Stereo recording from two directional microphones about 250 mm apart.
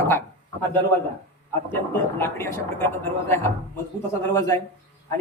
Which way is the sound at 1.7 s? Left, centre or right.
Centre.